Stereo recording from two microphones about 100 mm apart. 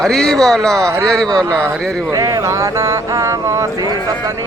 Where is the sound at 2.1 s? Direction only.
35° right (ahead or behind).